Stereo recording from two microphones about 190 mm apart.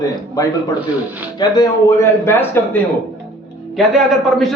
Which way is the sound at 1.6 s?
15° left (ahead or behind).